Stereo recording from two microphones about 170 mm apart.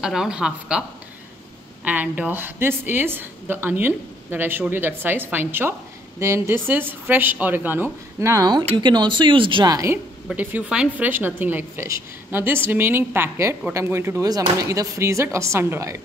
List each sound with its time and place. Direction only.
0.0 s speech: 5° right (ahead or behind)
1.9 s a woman's voice: 10° right (ahead or behind)
10.2 s a woman's voice: 10° right (ahead or behind)